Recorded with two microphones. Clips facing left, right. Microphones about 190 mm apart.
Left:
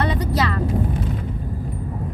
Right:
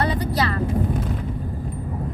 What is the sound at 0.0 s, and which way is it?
Vehicle, 30° right (ahead or behind).